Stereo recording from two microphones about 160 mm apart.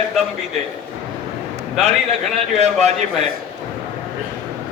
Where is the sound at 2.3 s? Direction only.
45° right (ahead or behind).